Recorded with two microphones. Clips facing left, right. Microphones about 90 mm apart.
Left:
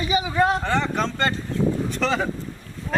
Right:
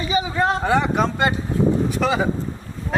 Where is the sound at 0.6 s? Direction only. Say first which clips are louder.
Right 4 dB; 10° right (ahead or behind).